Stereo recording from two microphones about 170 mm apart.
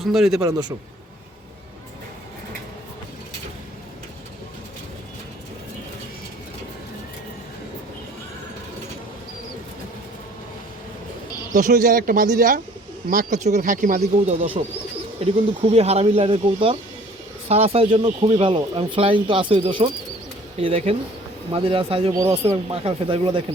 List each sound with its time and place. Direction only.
0.0 s a man's voice: centre (ahead or behind)
0.4 s a man's voice: 20° right (ahead or behind)
11.5 s speech: 50° right (ahead or behind); by 23.4 s 30° right (ahead or behind)